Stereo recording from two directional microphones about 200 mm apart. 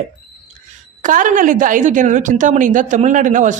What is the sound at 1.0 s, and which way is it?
A woman's voice, 40° right (ahead or behind).